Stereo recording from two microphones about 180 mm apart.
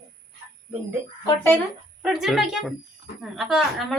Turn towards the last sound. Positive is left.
turn(degrees=0)  # may be behind; listen again after turning